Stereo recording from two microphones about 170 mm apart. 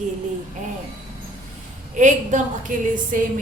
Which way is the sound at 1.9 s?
45° right (ahead or behind).